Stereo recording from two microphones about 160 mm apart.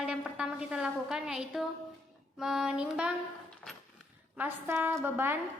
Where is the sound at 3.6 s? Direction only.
Centre (ahead or behind).